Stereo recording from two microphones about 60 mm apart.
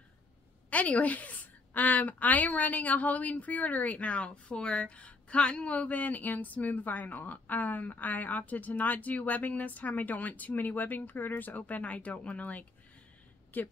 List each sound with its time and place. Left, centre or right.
0.7 s a woman's voice: left